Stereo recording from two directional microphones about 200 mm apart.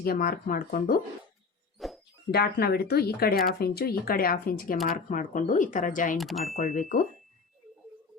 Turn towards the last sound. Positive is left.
turn(degrees=35)  # may be behind; listen again after turning